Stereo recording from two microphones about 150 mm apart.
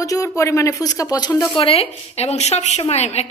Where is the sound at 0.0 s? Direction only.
20° left (ahead or behind).